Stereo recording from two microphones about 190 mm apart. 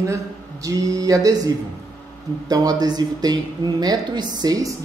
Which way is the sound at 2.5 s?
20° right (ahead or behind).